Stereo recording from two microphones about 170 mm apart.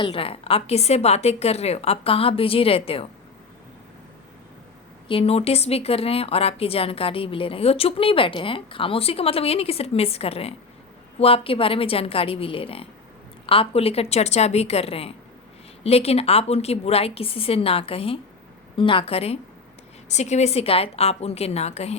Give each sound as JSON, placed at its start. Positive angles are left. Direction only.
{"t": 0.0, "sound": "speech", "side_deg": 35}
{"t": 5.0, "sound": "speech", "side_deg": 35}